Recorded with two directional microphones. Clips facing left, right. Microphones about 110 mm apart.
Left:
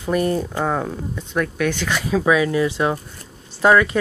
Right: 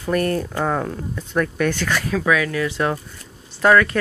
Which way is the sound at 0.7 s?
5° left (ahead or behind).